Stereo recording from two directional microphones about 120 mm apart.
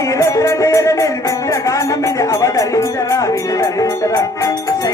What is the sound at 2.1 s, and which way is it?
Music, 25° left (ahead or behind).